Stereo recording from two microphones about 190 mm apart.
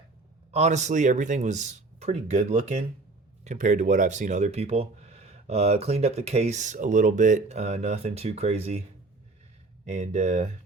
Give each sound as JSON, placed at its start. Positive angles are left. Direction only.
{"t": 0.5, "sound": "speech", "side_deg": -35}
{"t": 9.8, "sound": "speech", "side_deg": -35}